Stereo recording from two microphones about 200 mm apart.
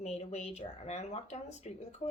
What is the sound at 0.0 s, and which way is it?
Speech, 35° left (ahead or behind).